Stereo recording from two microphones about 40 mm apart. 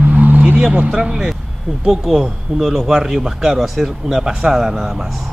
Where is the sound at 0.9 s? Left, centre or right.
Centre.